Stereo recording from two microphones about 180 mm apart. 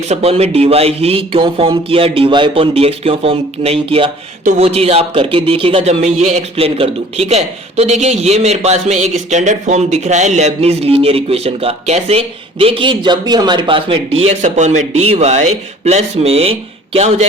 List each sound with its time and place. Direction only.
0.1 s speech: 35° right (ahead or behind)